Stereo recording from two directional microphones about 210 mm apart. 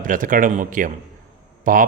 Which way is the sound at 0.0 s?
40° right (ahead or behind).